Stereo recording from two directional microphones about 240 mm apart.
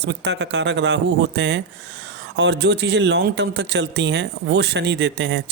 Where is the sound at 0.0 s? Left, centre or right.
Right.